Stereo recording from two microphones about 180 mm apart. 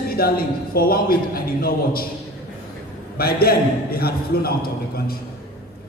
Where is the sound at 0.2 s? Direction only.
55° left (ahead or behind).